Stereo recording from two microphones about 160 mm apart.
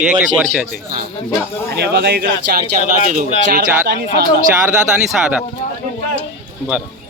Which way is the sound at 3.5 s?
65° right (ahead or behind).